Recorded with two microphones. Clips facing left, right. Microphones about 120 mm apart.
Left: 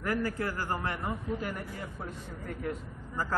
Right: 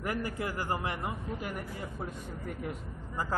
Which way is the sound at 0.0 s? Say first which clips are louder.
Left 3 dB; 15° right (ahead or behind).